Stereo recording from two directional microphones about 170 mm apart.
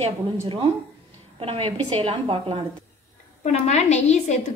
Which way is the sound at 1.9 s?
30° right (ahead or behind).